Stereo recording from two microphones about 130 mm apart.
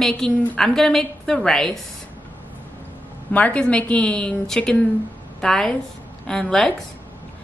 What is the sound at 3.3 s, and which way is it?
A woman's voice, 10° left (ahead or behind).